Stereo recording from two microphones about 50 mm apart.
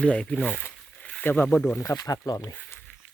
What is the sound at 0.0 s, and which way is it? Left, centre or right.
Speech, left.